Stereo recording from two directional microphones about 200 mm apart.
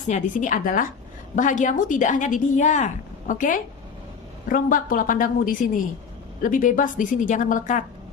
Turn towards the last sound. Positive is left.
turn(degrees=40)  # may be behind; listen again after turning